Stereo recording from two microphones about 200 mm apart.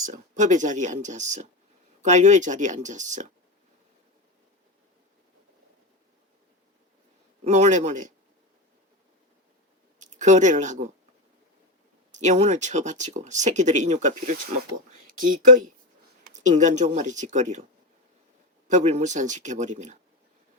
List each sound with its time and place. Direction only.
0.0 s speech: 40° right (ahead or behind)
7.4 s speech: 35° right (ahead or behind)
10.0 s speech: 35° right (ahead or behind)
12.1 s speech: 35° right (ahead or behind)
18.7 s speech: 35° right (ahead or behind)